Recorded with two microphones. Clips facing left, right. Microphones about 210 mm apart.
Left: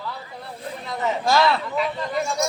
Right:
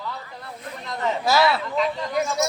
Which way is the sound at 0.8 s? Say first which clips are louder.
Even; 5° right (ahead or behind).